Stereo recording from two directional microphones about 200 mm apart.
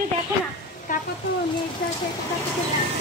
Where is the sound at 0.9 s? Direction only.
40° left (ahead or behind).